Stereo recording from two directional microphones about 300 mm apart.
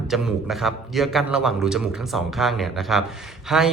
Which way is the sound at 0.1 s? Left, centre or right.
Centre.